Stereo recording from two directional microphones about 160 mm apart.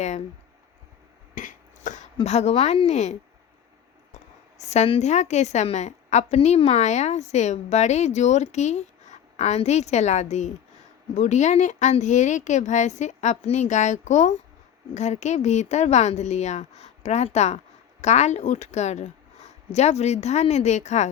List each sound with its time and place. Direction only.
1.4 s a sound: 55° left (ahead or behind)
2.1 s a woman's voice: 45° left (ahead or behind)
4.5 s a woman's voice: 45° left (ahead or behind)